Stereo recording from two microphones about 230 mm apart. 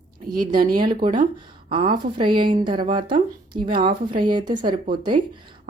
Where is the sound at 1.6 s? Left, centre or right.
Right.